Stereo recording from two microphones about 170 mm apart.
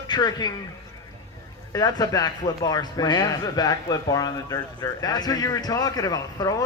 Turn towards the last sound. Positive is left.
turn(degrees=20)  # may be behind; listen again after turning